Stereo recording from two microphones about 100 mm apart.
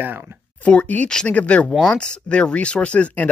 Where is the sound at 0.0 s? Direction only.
20° right (ahead or behind).